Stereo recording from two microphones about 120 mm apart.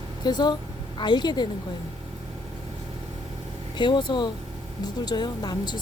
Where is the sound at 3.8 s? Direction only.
40° left (ahead or behind).